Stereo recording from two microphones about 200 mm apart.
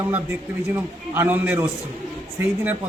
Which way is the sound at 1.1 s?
10° right (ahead or behind).